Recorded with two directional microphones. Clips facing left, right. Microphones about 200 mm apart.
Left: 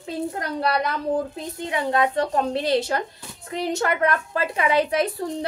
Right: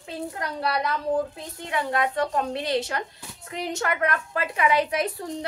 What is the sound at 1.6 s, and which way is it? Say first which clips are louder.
A woman's voice: left 3 dB; 25° left (ahead or behind).